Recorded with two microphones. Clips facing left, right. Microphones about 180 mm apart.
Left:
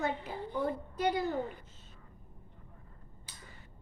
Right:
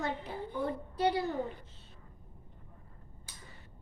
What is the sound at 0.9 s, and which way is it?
Speech, 30° right (ahead or behind).